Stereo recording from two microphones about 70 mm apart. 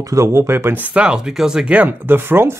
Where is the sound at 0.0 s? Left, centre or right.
Right.